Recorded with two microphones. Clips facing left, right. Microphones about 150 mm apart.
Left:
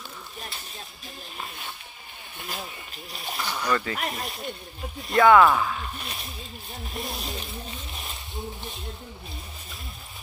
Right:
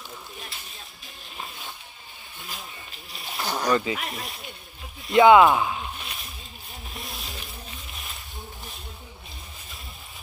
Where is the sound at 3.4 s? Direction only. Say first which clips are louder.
Right 4 dB; 40° right (ahead or behind).